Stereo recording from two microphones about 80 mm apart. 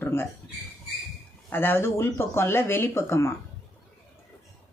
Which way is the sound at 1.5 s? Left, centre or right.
Left.